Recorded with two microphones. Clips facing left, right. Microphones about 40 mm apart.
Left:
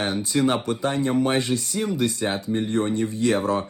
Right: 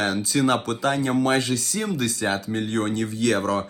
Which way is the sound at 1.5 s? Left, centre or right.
Centre.